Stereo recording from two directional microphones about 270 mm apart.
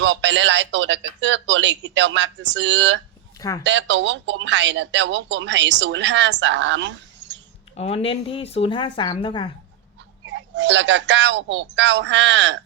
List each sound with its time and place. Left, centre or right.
0.0 s speech: right
7.8 s speech: left
10.2 s speech: right